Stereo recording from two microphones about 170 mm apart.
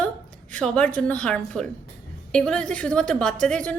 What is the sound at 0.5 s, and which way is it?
A woman's voice, 5° left (ahead or behind).